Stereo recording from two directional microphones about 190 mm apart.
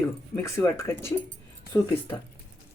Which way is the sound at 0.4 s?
15° left (ahead or behind).